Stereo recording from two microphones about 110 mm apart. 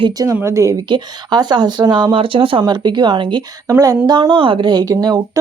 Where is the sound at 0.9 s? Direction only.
40° right (ahead or behind).